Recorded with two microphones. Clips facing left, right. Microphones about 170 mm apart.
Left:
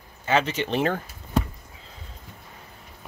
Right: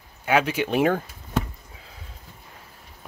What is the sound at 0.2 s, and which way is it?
Speech, 10° right (ahead or behind).